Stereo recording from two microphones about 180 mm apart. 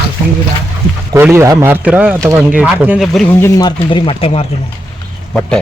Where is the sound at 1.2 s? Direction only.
15° right (ahead or behind).